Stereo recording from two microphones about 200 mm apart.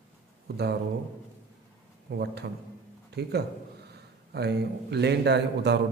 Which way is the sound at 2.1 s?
55° right (ahead or behind).